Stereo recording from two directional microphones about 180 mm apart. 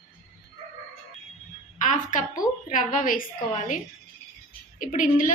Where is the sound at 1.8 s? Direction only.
45° left (ahead or behind).